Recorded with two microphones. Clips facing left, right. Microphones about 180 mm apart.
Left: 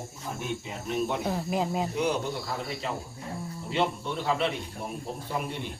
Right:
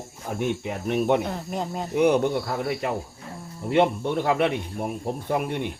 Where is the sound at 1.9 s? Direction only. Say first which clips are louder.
Right 8 dB; 60° right (ahead or behind).